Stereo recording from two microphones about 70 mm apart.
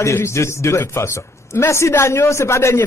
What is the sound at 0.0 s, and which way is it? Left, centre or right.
A man's voice, left.